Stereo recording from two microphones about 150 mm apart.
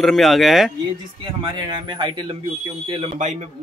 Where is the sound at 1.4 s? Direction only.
30° right (ahead or behind).